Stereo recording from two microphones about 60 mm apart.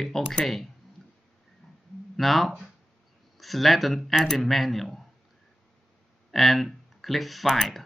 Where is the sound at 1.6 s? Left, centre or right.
Centre.